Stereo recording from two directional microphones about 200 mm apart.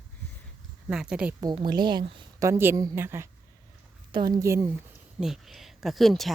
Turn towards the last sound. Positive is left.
turn(degrees=0)  # may be behind; listen again after turning